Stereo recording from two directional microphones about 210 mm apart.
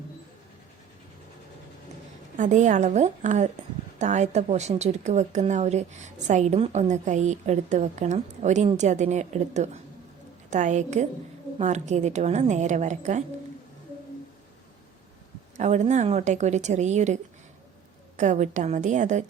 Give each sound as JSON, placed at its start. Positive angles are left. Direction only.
{"t": 2.4, "sound": "speech", "side_deg": -35}
{"t": 15.5, "sound": "speech", "side_deg": -35}
{"t": 18.2, "sound": "speech", "side_deg": -35}